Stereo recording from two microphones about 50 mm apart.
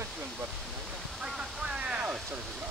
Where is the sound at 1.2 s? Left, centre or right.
Centre.